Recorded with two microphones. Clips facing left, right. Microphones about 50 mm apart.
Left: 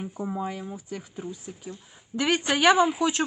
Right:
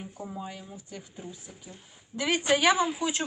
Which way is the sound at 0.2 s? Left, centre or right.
Left.